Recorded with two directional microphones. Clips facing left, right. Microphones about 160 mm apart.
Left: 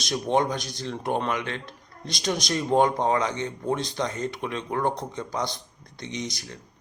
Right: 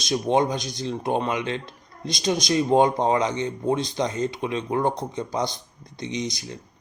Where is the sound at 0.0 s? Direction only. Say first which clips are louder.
Right 3 dB; 15° right (ahead or behind).